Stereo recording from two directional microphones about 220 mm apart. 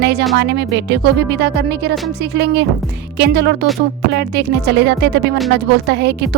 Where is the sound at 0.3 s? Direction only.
50° right (ahead or behind).